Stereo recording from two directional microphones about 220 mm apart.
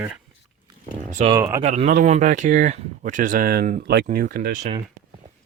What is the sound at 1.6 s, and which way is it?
Speech, 30° right (ahead or behind).